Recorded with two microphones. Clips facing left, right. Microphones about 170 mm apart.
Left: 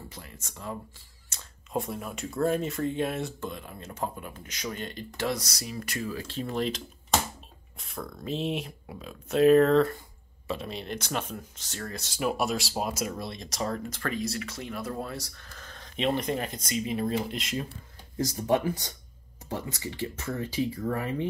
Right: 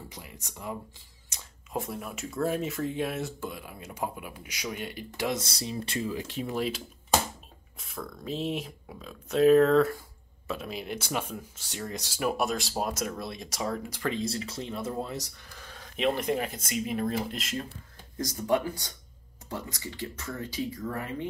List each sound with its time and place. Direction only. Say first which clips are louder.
0.1 s speech: even; 15° right (ahead or behind)
1.3 s a sound: even; 15° right (ahead or behind)
1.7 s speech: left 2 dB; centre (ahead or behind)
5.4 s speech: right 3 dB; 30° right (ahead or behind)
12.2 s speech: even; centre (ahead or behind)
14.1 s speech: even; 30° right (ahead or behind); by 17.6 s centre (ahead or behind)
18.1 s speech: left 1 dB; 25° left (ahead or behind)